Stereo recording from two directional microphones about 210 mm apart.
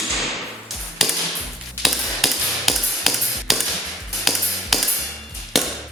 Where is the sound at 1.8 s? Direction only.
Centre (ahead or behind).